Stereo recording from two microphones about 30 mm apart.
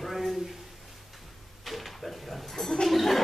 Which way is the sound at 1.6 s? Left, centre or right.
Centre.